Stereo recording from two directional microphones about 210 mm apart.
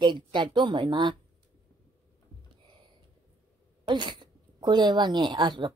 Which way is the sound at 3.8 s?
20° right (ahead or behind).